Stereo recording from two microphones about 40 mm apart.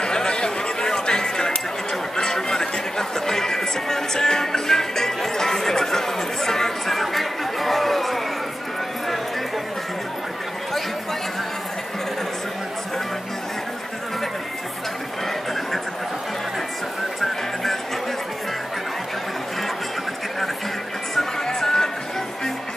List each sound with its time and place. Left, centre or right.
0.0 s chatter: centre
2.1 s music: centre
21.1 s music: centre